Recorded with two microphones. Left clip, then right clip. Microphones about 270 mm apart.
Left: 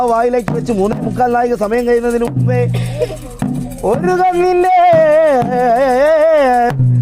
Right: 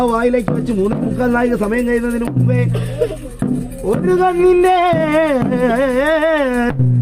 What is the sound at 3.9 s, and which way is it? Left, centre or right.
A man's voice, left.